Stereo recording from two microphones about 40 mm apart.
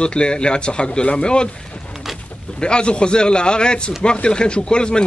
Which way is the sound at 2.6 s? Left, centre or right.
Left.